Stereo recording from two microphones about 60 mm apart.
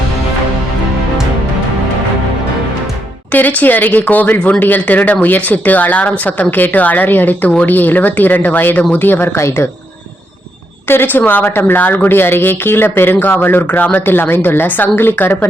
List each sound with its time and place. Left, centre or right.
3.3 s speech: left
10.8 s speech: left